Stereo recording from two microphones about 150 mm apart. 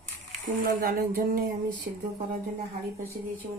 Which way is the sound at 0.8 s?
90° right.